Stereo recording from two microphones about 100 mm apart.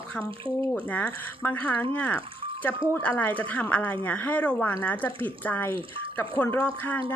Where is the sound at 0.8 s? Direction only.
15° left (ahead or behind).